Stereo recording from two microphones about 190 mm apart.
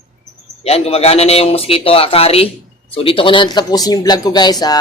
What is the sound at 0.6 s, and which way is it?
A man's voice, 35° left (ahead or behind).